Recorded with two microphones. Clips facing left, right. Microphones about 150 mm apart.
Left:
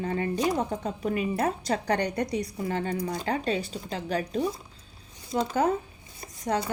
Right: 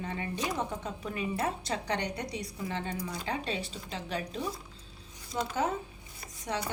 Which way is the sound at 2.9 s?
55° left (ahead or behind).